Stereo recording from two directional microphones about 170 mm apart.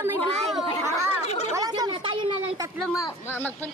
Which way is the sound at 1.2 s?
40° left (ahead or behind).